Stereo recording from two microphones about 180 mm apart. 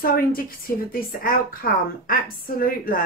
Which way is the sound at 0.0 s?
55° left (ahead or behind).